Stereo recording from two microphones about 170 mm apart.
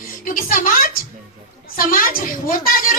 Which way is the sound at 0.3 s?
55° left (ahead or behind).